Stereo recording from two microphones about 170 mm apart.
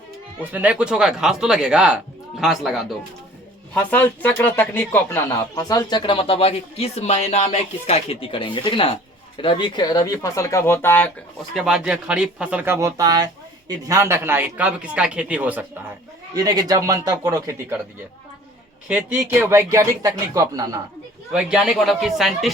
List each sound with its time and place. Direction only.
0.5 s speech: 5° right (ahead or behind)
3.8 s speech: 10° left (ahead or behind)
11.5 s speech: 5° right (ahead or behind)
16.3 s speech: 20° right (ahead or behind)
18.9 s speech: 10° right (ahead or behind)
21.3 s speech: 5° right (ahead or behind)